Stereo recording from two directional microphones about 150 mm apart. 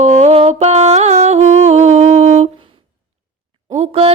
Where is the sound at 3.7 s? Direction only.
45° right (ahead or behind).